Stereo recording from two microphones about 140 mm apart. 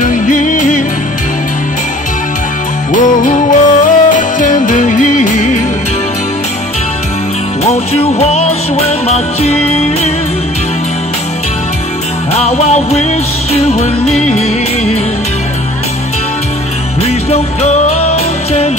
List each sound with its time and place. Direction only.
0.0 s music: 65° left (ahead or behind)
2.9 s music: 65° left (ahead or behind)
7.6 s music: 50° left (ahead or behind)
12.4 s music: 50° left (ahead or behind)
17.0 s music: 50° left (ahead or behind)